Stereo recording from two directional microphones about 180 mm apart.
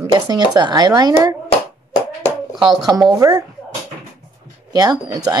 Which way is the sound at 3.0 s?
20° right (ahead or behind).